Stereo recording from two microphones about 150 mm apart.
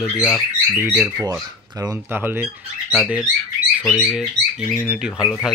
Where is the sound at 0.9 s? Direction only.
20° right (ahead or behind).